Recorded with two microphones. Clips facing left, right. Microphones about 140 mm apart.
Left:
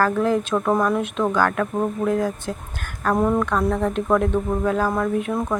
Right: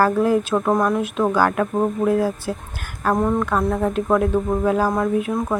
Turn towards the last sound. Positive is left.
turn(degrees=-10)  # may be behind; listen again after turning